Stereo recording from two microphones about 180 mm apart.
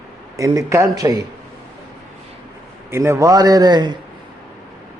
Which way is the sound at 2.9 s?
15° right (ahead or behind).